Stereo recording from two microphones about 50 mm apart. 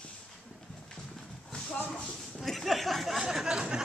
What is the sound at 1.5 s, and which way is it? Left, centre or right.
Shuffle, centre.